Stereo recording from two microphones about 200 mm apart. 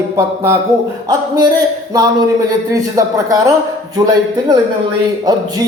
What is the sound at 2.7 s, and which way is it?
Speech, 15° right (ahead or behind).